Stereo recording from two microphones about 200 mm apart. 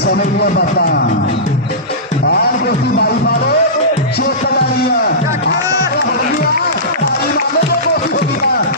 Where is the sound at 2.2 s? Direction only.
55° left (ahead or behind).